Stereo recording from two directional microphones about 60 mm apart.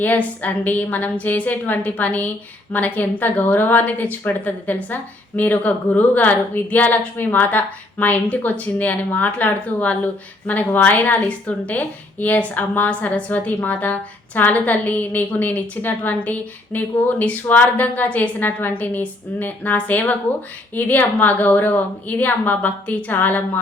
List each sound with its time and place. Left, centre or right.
0.0 s speech: left